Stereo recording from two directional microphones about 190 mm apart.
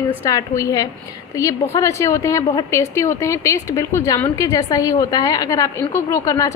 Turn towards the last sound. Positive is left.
turn(degrees=20)  # may be behind; listen again after turning